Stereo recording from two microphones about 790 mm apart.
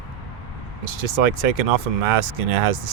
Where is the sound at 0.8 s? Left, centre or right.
Right.